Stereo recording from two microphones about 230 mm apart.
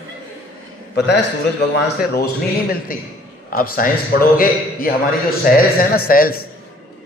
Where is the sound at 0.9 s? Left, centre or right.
Left.